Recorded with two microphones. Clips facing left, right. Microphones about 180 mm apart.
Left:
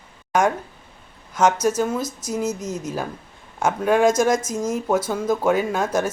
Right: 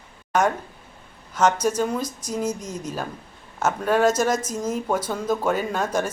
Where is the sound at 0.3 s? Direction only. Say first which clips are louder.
Left 2 dB; 10° left (ahead or behind).